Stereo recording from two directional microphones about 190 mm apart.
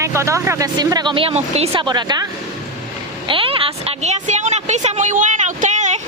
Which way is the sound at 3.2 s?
30° right (ahead or behind).